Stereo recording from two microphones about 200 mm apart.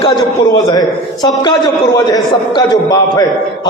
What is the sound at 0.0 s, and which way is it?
A man's voice, 20° left (ahead or behind).